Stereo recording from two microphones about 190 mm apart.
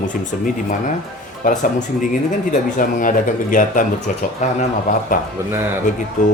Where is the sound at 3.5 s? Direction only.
45° left (ahead or behind).